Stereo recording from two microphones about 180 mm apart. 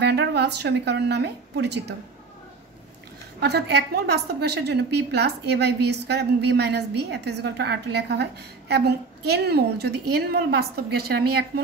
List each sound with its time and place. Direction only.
0.0 s a woman's voice: 70° right (ahead or behind)
3.3 s a woman's voice: 65° right (ahead or behind)